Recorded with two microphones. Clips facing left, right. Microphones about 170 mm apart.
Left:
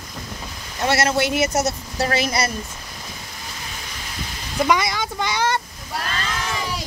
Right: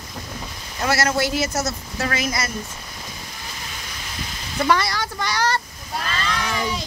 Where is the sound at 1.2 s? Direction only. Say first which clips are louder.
Left 2 dB; 20° left (ahead or behind).